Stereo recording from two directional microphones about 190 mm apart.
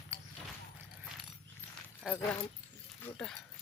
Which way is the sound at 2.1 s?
5° right (ahead or behind).